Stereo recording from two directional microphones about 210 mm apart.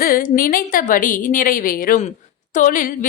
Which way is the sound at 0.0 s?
40° left (ahead or behind).